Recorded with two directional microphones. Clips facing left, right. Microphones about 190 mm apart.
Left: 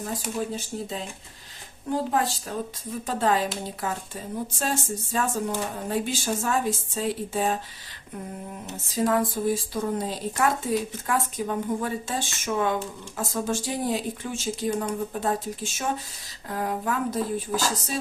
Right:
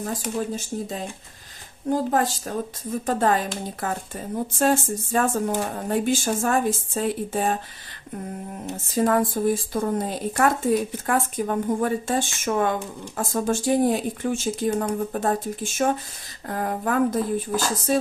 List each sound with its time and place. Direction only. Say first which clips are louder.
0.3 s speech: right 2 dB; 45° right (ahead or behind)
2.0 s speech: right 3 dB; 45° right (ahead or behind)
9.0 s speech: right 3 dB; 50° right (ahead or behind)